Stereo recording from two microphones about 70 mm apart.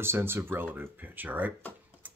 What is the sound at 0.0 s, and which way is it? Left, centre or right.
Speech, right.